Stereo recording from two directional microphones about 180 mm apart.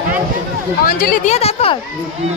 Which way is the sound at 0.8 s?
50° left (ahead or behind).